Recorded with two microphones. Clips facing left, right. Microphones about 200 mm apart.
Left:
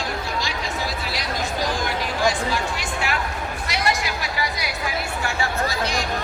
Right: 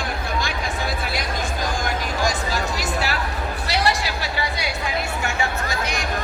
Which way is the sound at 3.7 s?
35° right (ahead or behind).